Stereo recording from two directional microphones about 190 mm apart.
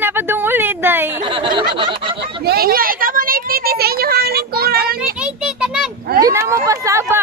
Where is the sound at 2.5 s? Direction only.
50° right (ahead or behind).